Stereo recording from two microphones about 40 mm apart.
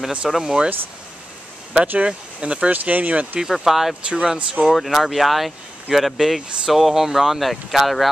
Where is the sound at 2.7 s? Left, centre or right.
Right.